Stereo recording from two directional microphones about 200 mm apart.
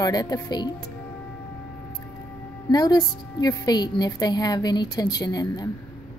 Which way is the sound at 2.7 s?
20° left (ahead or behind).